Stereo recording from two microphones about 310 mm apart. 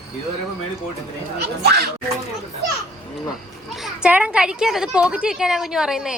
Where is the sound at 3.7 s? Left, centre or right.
Centre.